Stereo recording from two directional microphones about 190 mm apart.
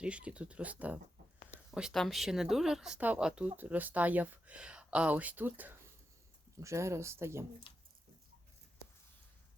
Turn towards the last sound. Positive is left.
turn(degrees=25)  # may be behind; listen again after turning